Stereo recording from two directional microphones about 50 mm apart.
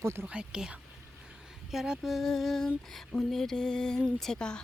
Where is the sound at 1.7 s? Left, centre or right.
Centre.